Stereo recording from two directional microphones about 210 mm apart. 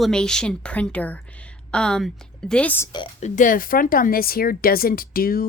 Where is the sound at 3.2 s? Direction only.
40° left (ahead or behind).